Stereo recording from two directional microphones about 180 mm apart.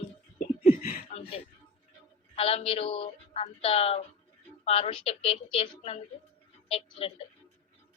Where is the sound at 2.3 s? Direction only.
35° left (ahead or behind).